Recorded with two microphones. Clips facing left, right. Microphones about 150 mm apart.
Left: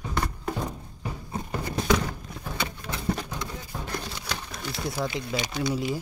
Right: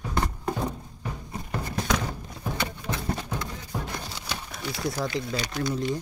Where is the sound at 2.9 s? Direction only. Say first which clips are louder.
Left 1 dB; 20° right (ahead or behind).